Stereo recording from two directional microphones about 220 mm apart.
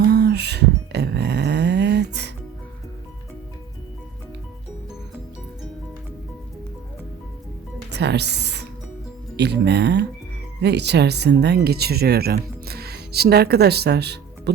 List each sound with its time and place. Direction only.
0.0 s a sound: 50° right (ahead or behind)
7.9 s music: 50° right (ahead or behind)
9.3 s speech: 50° right (ahead or behind)